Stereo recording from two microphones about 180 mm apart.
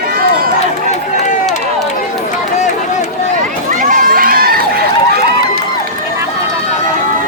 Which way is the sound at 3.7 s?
50° right (ahead or behind).